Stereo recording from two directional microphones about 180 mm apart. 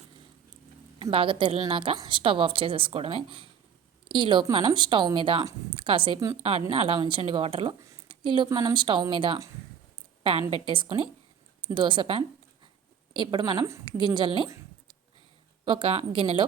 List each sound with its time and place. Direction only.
0.9 s a woman's voice: 30° right (ahead or behind)
10.5 s a woman's voice: 30° right (ahead or behind)
15.6 s a woman's voice: 30° right (ahead or behind)